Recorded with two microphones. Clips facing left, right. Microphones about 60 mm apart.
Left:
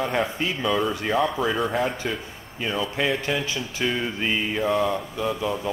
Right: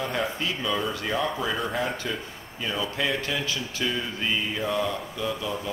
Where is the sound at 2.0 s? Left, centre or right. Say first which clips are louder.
Left 3 dB; left.